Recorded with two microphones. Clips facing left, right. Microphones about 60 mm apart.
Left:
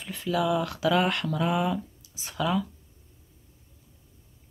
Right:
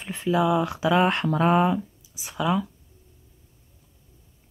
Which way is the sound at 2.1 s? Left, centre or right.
Centre.